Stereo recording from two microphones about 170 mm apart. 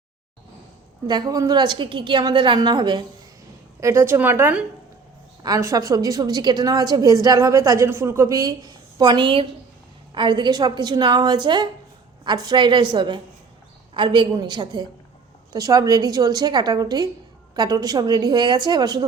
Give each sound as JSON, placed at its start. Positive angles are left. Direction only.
{"t": 1.0, "sound": "a woman's voice", "side_deg": -25}